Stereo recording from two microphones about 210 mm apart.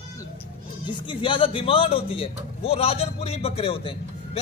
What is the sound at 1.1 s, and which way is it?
A man's voice, 25° left (ahead or behind).